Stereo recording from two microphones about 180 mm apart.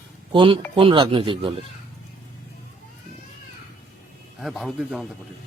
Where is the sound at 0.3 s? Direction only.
30° right (ahead or behind).